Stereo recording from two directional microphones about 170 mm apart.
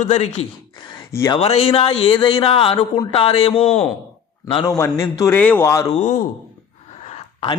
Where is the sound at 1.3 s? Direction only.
35° left (ahead or behind); by 5.9 s 15° left (ahead or behind).